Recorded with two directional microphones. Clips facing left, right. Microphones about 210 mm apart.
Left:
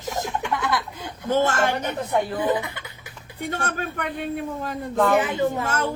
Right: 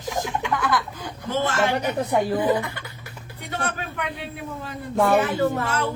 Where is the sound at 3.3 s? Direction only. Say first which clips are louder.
Left 2 dB; 50° left (ahead or behind).